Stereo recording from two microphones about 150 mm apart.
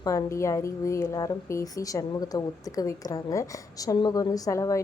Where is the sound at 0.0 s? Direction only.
25° left (ahead or behind).